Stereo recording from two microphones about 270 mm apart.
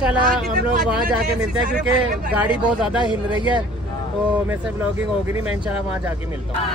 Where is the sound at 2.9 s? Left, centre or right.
Centre.